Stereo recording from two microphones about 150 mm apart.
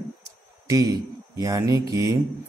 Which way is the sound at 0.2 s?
20° right (ahead or behind).